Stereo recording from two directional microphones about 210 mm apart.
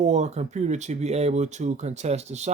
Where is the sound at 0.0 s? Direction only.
35° right (ahead or behind).